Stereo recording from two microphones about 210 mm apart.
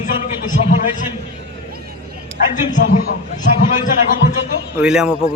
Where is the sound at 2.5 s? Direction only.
35° left (ahead or behind).